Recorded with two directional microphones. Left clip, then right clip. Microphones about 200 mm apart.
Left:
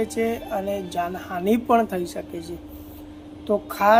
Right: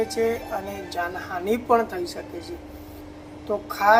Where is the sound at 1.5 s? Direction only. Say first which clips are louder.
Even; 55° left (ahead or behind).